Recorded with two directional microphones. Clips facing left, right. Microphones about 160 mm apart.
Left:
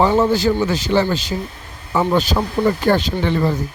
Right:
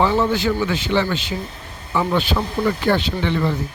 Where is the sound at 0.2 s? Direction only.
35° left (ahead or behind).